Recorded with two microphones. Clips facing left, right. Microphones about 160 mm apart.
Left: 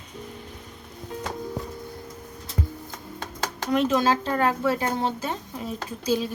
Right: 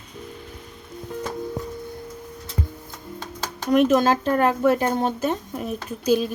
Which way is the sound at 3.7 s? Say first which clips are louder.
Right 4 dB; 50° right (ahead or behind).